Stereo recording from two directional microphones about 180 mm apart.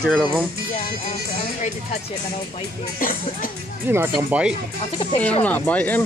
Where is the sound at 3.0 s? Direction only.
50° left (ahead or behind).